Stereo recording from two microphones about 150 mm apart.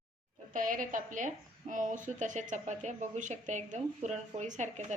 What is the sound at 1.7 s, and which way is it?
Speech, 60° right (ahead or behind).